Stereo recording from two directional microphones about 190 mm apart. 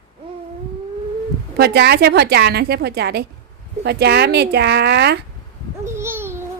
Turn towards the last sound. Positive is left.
turn(degrees=-10)  # may be behind; listen again after turning